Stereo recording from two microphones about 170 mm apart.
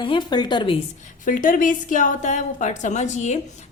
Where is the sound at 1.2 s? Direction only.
50° left (ahead or behind).